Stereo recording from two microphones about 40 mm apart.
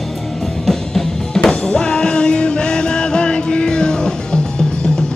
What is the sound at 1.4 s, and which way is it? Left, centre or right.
Music, centre.